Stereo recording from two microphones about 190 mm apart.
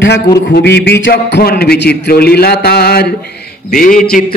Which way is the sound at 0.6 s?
60° left (ahead or behind).